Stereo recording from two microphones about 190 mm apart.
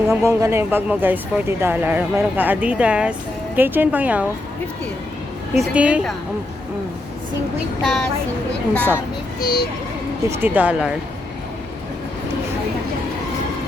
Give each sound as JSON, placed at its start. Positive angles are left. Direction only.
{"t": 0.1, "sound": "speech", "side_deg": -15}
{"t": 5.5, "sound": "a woman's voice", "side_deg": -5}
{"t": 7.8, "sound": "a woman's voice", "side_deg": 0}
{"t": 9.4, "sound": "a child's voice", "side_deg": 50}
{"t": 10.2, "sound": "speech", "side_deg": -10}